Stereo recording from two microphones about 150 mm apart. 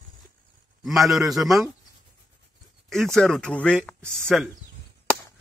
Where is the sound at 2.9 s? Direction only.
5° left (ahead or behind).